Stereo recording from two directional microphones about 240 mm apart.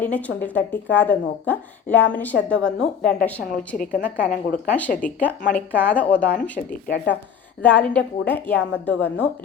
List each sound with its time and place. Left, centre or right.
0.0 s speech: centre
3.9 s a woman's voice: left
4.9 s speech: centre
6.8 s speech: left
7.6 s speech: centre